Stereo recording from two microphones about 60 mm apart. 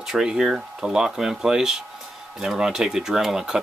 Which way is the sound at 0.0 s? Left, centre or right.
Centre.